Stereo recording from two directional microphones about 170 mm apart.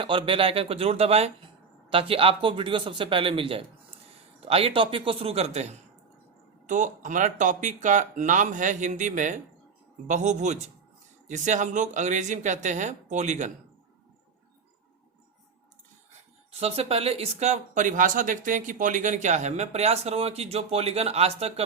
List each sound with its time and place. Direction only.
0.0 s speech: 30° right (ahead or behind)
16.5 s speech: 35° right (ahead or behind)